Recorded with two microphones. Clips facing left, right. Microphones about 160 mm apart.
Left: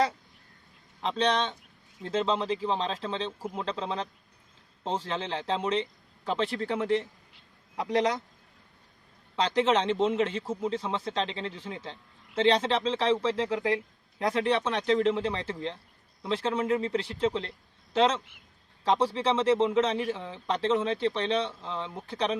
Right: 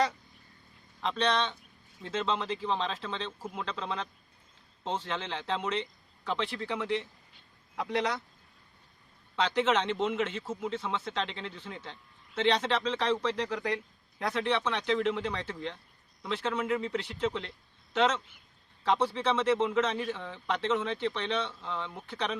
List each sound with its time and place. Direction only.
1.0 s speech: 30° left (ahead or behind)
9.3 s speech: 35° left (ahead or behind)